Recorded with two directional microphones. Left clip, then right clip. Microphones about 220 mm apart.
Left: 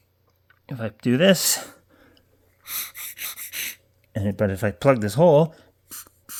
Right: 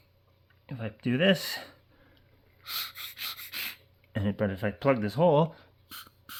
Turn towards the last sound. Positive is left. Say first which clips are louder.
# left 4 dB
turn(degrees=20)  # may be behind; listen again after turning